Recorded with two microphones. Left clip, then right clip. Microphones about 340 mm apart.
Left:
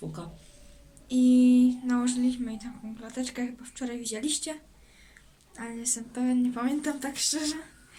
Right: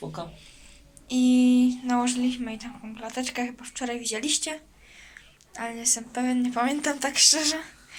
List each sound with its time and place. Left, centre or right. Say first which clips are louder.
1.0 s speech: right 1 dB; centre